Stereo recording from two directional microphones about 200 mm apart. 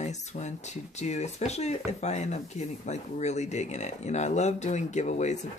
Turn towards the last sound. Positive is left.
turn(degrees=35)  # may be behind; listen again after turning